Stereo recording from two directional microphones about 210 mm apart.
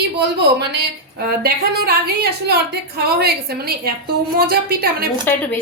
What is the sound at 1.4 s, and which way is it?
Speech, 50° right (ahead or behind).